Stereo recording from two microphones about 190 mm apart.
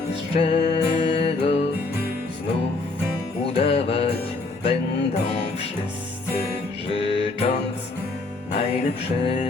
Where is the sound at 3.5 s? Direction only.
30° left (ahead or behind).